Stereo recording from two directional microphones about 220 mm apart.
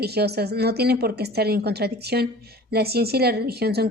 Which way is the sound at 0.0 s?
45° right (ahead or behind).